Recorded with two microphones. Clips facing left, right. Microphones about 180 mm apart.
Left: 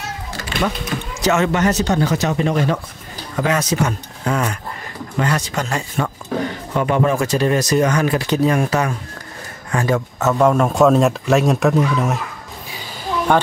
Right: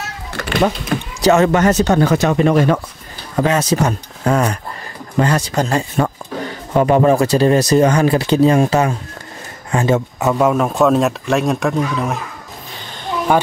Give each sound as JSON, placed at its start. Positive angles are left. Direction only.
{"t": 0.3, "sound": "children playing", "side_deg": -60}
{"t": 0.9, "sound": "a sound", "side_deg": -50}
{"t": 1.2, "sound": "speech", "side_deg": -40}
{"t": 3.3, "sound": "speech", "side_deg": -30}
{"t": 10.2, "sound": "a man's voice", "side_deg": -10}
{"t": 13.3, "sound": "a man's voice", "side_deg": -5}